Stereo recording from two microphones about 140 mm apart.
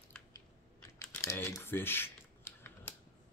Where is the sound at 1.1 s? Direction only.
20° left (ahead or behind).